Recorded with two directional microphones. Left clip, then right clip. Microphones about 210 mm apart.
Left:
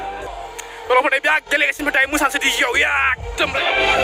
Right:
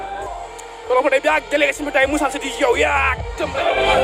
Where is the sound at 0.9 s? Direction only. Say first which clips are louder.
Even; centre (ahead or behind).